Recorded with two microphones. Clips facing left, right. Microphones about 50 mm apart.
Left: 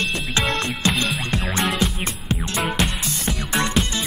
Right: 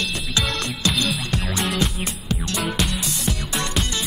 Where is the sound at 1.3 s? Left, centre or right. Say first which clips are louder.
Left 3 dB; left.